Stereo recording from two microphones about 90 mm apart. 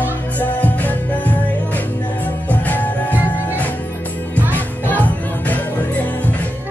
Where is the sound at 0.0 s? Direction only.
20° left (ahead or behind).